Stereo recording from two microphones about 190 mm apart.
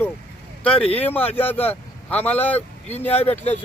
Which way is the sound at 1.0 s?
10° left (ahead or behind).